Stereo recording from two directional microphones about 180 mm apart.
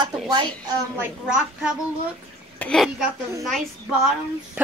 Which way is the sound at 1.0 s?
5° right (ahead or behind).